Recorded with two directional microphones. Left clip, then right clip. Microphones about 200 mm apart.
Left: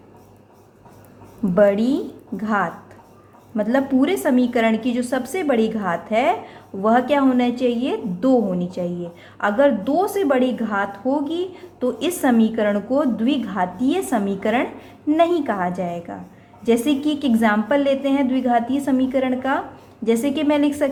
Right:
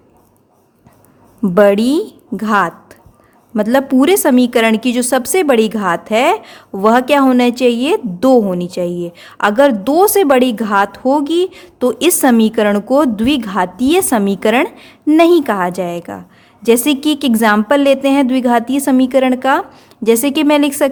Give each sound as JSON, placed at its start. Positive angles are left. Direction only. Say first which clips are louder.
{"t": 1.5, "sound": "a woman's voice", "louder": "right 6 dB", "side_deg": -45}